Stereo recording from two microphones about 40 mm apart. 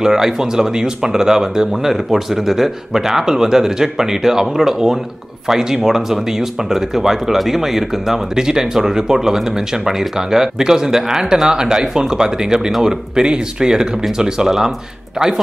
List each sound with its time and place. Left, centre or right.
0.0 s speech: centre